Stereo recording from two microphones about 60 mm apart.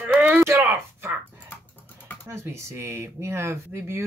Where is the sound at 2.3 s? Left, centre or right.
Right.